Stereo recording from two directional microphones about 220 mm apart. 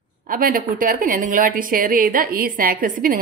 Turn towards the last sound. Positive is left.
turn(degrees=-40)  # may be behind; listen again after turning